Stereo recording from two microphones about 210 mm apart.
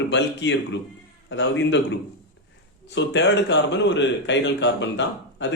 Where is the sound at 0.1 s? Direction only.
55° left (ahead or behind).